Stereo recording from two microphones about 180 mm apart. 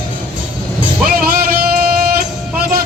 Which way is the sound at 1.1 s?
55° right (ahead or behind).